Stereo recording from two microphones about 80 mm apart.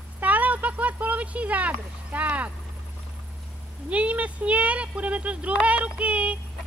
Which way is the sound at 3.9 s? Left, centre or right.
Centre.